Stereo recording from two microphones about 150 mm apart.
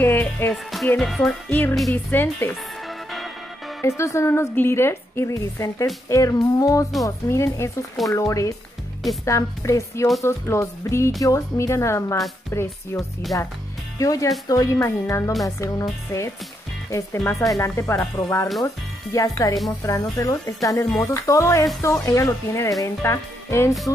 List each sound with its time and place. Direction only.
0.0 s music: 15° left (ahead or behind)
0.8 s speech: 5° left (ahead or behind)
2.9 s music: centre (ahead or behind)
3.8 s a woman's voice: 20° left (ahead or behind)